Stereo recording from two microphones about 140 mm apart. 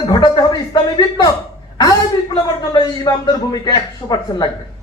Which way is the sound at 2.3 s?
30° left (ahead or behind).